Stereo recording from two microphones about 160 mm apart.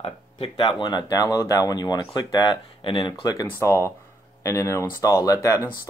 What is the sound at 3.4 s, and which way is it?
Speech, 15° left (ahead or behind).